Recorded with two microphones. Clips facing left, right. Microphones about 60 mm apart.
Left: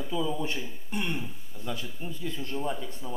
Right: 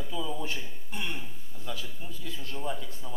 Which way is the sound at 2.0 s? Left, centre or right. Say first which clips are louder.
Left 6 dB; left.